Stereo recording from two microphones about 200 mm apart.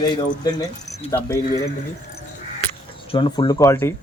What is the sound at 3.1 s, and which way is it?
Speech, 25° left (ahead or behind).